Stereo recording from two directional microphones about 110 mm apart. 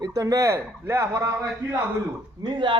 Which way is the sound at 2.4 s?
45° right (ahead or behind).